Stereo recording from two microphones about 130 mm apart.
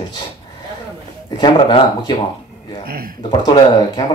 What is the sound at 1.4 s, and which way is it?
Speech, 35° left (ahead or behind).